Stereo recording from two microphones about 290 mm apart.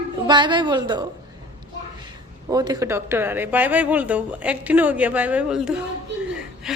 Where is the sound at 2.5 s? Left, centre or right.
Centre.